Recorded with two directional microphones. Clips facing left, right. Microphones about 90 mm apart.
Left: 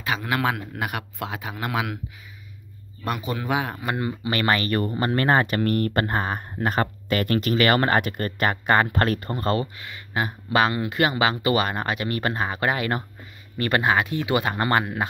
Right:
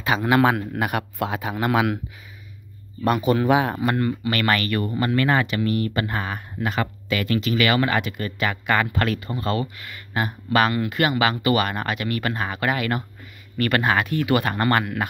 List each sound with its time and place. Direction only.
0.0 s speech: 30° right (ahead or behind); by 2.0 s 55° right (ahead or behind)
3.1 s speech: 55° right (ahead or behind)
3.8 s speech: 15° left (ahead or behind)